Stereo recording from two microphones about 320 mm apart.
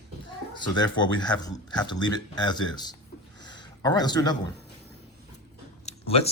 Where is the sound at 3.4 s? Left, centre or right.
Centre.